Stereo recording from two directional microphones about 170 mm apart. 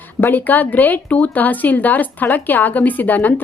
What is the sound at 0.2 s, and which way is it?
Speech, 10° left (ahead or behind).